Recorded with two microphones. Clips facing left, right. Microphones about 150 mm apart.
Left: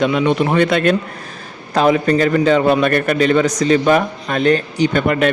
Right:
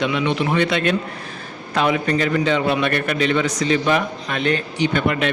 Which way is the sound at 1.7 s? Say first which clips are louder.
Left 5 dB; 40° left (ahead or behind).